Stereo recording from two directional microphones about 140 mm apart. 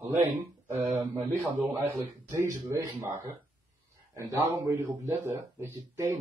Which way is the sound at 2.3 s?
20° right (ahead or behind).